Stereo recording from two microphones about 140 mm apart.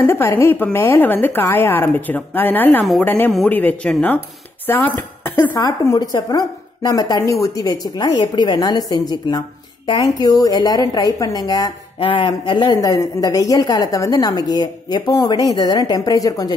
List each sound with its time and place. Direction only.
0.0 s a woman's voice: 20° left (ahead or behind)
2.8 s speech: centre (ahead or behind)
3.1 s a woman's voice: 15° left (ahead or behind)
5.6 s a woman's voice: 25° left (ahead or behind)